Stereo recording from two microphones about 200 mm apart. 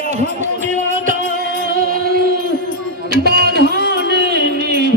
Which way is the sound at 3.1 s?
55° right (ahead or behind).